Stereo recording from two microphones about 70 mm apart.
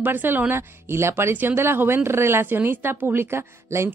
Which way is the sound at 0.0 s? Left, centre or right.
Right.